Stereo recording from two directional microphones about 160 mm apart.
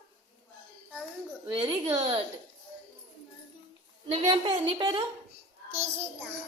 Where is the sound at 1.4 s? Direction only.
25° right (ahead or behind).